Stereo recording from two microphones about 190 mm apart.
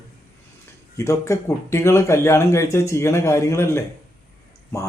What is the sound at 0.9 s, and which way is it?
Speech, 15° left (ahead or behind).